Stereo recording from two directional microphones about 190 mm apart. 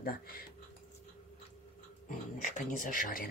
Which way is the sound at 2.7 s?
45° left (ahead or behind).